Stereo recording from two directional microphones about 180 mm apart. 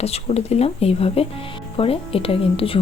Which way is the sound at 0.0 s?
35° left (ahead or behind).